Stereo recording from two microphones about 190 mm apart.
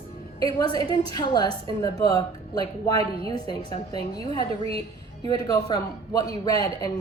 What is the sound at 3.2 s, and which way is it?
A man's voice, 20° left (ahead or behind).